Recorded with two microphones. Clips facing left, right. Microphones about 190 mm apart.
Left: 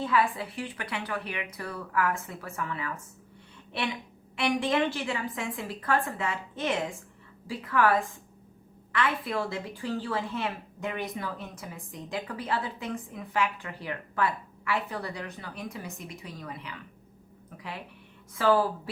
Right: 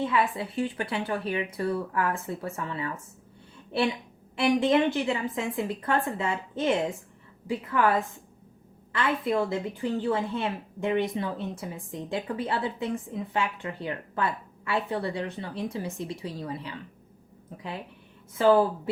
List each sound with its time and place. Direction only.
0.0 s a woman's voice: 25° right (ahead or behind)
8.9 s a woman's voice: 25° right (ahead or behind)
18.3 s a woman's voice: 20° right (ahead or behind)